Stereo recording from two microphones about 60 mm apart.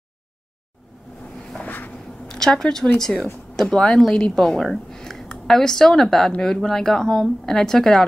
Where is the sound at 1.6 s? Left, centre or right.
Left.